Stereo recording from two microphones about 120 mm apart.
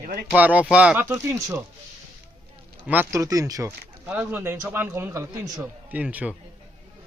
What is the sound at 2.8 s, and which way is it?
Speech, 15° right (ahead or behind).